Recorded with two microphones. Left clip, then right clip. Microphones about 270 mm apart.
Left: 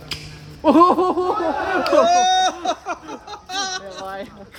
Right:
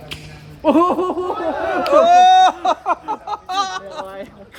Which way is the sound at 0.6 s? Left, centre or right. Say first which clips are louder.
Left 1 dB; left.